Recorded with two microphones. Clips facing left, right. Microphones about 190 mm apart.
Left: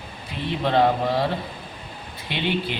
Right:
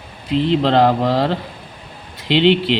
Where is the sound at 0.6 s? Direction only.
85° right.